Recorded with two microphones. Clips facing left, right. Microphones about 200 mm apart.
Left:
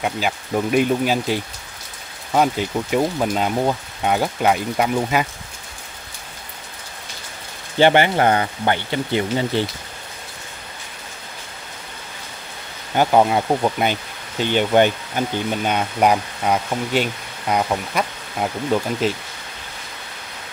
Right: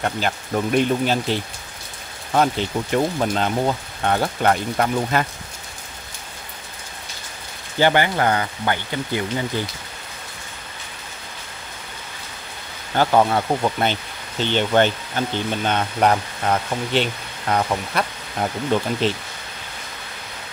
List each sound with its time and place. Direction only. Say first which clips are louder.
0.0 s speech: left 1 dB; 5° left (ahead or behind)
7.8 s speech: left 3 dB; 20° left (ahead or behind)
12.9 s speech: left 1 dB; 15° left (ahead or behind)